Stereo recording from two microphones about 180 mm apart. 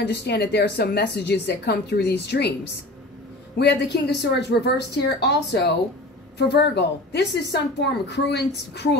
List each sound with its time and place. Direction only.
0.0 s a woman's voice: 65° left (ahead or behind)